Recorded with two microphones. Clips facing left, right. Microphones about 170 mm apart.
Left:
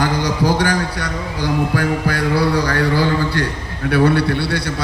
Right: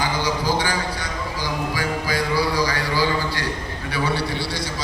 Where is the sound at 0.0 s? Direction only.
65° left (ahead or behind).